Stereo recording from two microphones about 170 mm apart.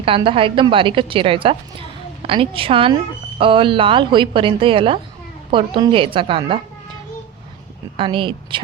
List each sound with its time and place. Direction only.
0.0 s a woman's voice: 30° right (ahead or behind)
7.9 s a woman's voice: 30° right (ahead or behind)